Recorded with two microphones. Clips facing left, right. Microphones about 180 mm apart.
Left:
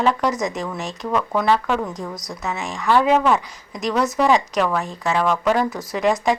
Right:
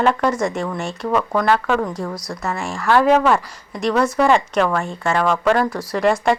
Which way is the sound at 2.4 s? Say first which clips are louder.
Right 1 dB; centre (ahead or behind).